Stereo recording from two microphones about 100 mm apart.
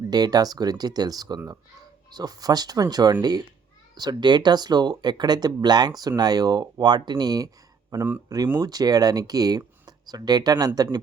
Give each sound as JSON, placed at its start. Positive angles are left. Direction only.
{"t": 0.1, "sound": "speech", "side_deg": -40}